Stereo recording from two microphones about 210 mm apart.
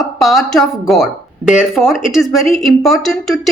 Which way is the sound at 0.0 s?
Centre (ahead or behind).